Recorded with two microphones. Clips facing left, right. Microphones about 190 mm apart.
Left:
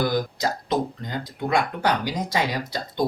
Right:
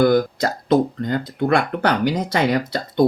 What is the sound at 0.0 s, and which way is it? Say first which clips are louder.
Speech: right 8 dB; 55° right (ahead or behind).